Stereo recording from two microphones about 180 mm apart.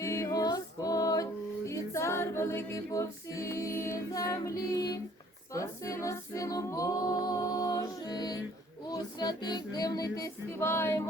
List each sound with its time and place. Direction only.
0.0 s music: 20° left (ahead or behind)
5.5 s a capella: 15° left (ahead or behind)
8.9 s music: 20° left (ahead or behind)